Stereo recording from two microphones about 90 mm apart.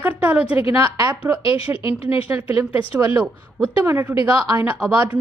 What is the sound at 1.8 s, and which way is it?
Speech, 80° left.